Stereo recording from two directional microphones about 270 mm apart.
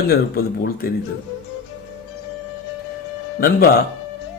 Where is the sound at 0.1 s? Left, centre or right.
Left.